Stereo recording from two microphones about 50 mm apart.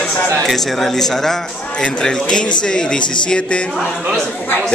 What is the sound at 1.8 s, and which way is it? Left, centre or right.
Speech, left.